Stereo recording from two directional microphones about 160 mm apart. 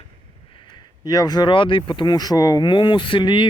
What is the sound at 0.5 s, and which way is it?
Speech, 30° left (ahead or behind).